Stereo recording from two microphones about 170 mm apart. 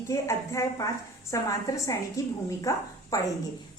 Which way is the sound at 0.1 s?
20° left (ahead or behind).